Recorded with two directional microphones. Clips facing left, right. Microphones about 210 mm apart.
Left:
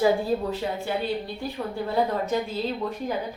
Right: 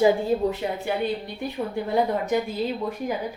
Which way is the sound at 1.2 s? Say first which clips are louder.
Right 2 dB; 20° right (ahead or behind).